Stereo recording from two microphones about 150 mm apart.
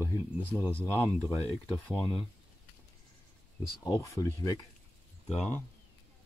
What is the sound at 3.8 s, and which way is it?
Speech, 20° left (ahead or behind).